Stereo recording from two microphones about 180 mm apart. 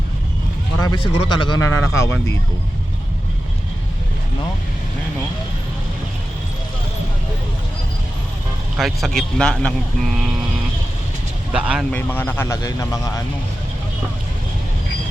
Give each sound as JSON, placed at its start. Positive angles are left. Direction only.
{"t": 0.8, "sound": "speech", "side_deg": 20}
{"t": 8.8, "sound": "speech", "side_deg": 0}
{"t": 11.5, "sound": "speech", "side_deg": -5}
{"t": 11.9, "sound": "speech", "side_deg": 10}